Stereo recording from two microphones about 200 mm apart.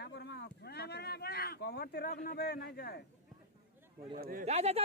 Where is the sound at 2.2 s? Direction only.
50° left (ahead or behind).